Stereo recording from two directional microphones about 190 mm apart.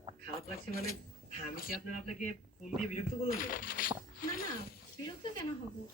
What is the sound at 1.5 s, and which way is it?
Speech, 50° left (ahead or behind).